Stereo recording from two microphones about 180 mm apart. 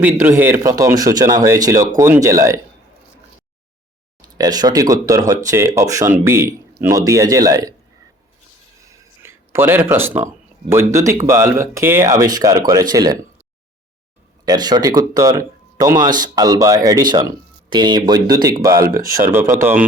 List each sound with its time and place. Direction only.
0.0 s speech: 10° right (ahead or behind)
4.2 s speech: 20° right (ahead or behind)
8.9 s a sound: 15° right (ahead or behind)
10.7 s speech: 15° right (ahead or behind)
14.4 s speech: 20° right (ahead or behind)